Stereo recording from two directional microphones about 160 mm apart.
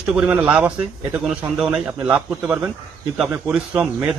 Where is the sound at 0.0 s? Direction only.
5° right (ahead or behind).